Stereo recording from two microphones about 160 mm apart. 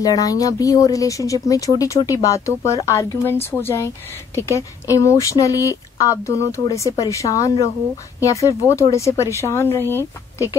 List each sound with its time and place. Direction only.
0.0 s speech: 20° left (ahead or behind)